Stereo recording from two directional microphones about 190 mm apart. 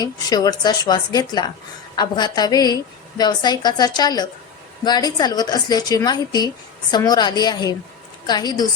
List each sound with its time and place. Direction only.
0.0 s a woman's voice: 20° left (ahead or behind)